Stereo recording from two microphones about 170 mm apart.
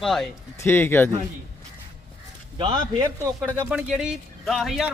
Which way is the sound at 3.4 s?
5° right (ahead or behind).